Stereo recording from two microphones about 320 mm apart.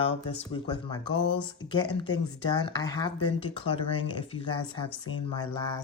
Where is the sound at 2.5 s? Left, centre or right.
Centre.